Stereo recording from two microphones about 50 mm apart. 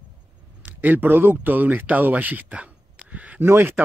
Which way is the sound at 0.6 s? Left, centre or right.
Right.